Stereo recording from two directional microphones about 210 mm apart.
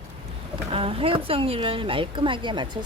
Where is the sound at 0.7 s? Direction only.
25° right (ahead or behind).